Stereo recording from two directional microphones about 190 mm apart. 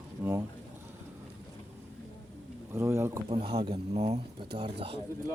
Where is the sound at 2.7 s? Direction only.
15° right (ahead or behind).